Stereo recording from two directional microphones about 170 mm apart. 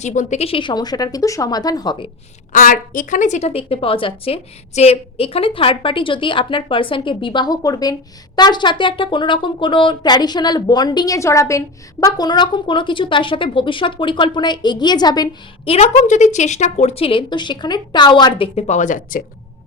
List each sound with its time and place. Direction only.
0.0 s speech: 45° left (ahead or behind); by 2.0 s 25° left (ahead or behind)
2.5 s a woman's voice: 50° left (ahead or behind); by 15.7 s 25° left (ahead or behind)
15.7 s a woman's voice: 40° left (ahead or behind)